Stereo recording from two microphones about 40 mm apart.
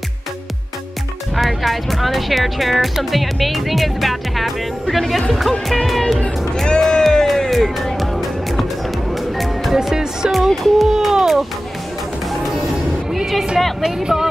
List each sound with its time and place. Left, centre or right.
1.3 s speech: centre
5.9 s speech: centre
6.8 s a sound: centre
7.2 s music: centre
9.8 s speech: centre
10.3 s speech: centre
13.1 s speech: centre
13.8 s speech: centre